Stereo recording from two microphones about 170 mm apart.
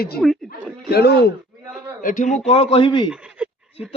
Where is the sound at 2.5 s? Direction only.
35° left (ahead or behind).